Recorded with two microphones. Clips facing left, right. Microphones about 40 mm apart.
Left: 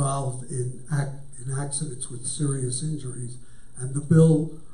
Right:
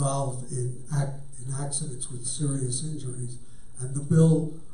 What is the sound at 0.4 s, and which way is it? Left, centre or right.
A man's voice, centre.